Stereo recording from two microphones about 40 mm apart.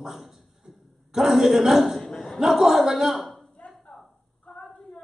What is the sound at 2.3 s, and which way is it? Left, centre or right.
Speech, centre.